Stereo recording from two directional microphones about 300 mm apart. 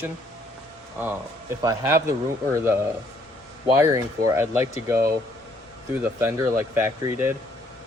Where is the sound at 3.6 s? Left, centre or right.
Centre.